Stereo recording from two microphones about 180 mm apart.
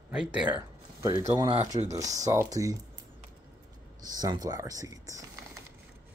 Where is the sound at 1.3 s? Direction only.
20° right (ahead or behind).